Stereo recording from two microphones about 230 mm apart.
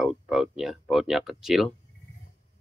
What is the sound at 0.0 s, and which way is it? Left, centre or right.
Speech, centre.